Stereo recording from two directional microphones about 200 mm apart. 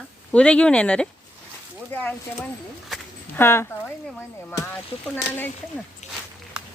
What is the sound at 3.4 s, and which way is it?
Speech, 10° left (ahead or behind).